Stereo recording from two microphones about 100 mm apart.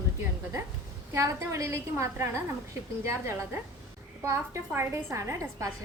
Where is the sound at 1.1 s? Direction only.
30° right (ahead or behind).